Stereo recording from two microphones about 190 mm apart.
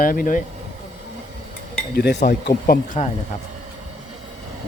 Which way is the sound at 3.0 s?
35° left (ahead or behind).